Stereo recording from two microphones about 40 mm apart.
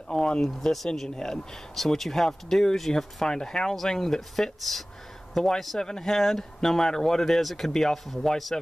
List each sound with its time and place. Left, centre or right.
0.1 s speech: centre
0.5 s a man's voice: centre
3.3 s a man's voice: centre